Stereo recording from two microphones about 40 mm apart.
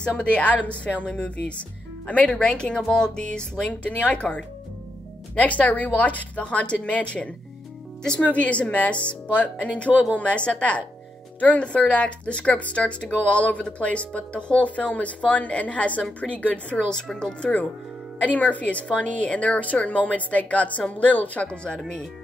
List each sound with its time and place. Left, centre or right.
0.0 s a woman's voice: left
2.3 s speech: left
3.6 s a woman's voice: left
5.3 s a woman's voice: left
16.9 s speech: centre
18.2 s a woman's voice: left